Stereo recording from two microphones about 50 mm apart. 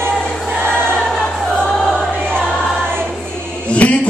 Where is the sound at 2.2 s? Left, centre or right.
Centre.